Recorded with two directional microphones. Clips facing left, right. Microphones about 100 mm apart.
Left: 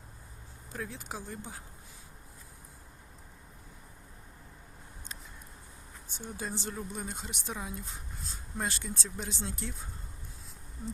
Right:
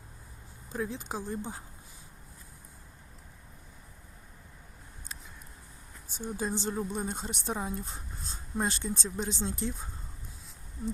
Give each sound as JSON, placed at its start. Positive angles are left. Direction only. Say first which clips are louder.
{"t": 0.7, "sound": "speech", "louder": "right 5 dB", "side_deg": -20}
{"t": 6.3, "sound": "speech", "louder": "right 6 dB", "side_deg": -20}